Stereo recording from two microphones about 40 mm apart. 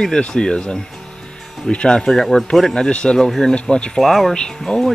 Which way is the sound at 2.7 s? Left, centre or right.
Left.